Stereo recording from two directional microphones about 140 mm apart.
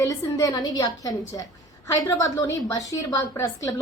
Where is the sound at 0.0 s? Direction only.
25° left (ahead or behind).